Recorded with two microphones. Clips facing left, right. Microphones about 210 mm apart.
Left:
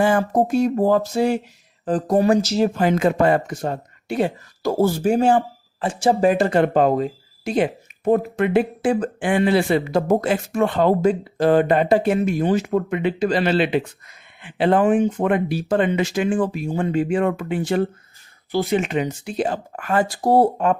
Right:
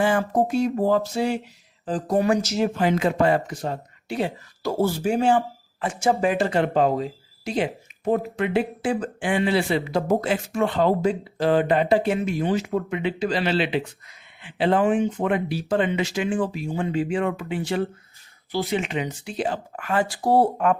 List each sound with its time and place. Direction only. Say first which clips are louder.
0.0 s speech: left 3 dB; 45° left (ahead or behind)
2.8 s speech: left 2 dB; 50° left (ahead or behind)